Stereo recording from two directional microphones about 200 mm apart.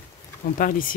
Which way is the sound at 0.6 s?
40° left (ahead or behind).